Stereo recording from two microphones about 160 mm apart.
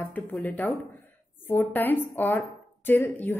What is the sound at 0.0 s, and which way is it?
Speech, 10° left (ahead or behind).